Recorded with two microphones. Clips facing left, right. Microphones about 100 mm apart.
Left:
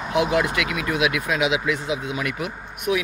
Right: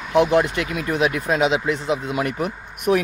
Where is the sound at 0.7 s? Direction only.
35° right (ahead or behind).